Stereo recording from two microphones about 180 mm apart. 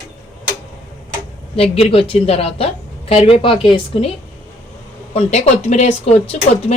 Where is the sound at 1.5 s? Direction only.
30° left (ahead or behind).